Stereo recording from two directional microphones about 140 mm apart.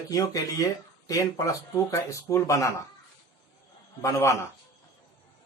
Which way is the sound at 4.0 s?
20° left (ahead or behind).